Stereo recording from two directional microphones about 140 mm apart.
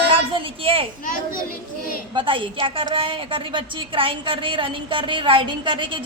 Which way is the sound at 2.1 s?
40° right (ahead or behind).